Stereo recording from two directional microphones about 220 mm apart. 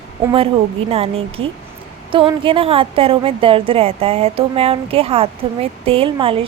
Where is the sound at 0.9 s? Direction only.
25° right (ahead or behind).